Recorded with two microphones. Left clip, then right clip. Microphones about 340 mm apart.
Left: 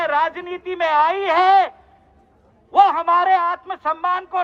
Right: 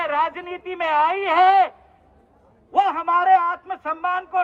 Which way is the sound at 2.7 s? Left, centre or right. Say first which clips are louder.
Left 5 dB; centre.